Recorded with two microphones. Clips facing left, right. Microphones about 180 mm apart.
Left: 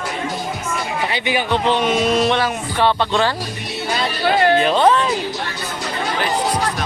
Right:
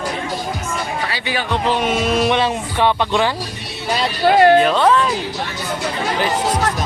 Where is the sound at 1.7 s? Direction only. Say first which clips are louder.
Even; 5° right (ahead or behind).